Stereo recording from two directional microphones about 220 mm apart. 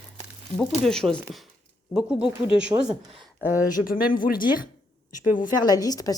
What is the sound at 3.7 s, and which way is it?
Speech, 40° left (ahead or behind).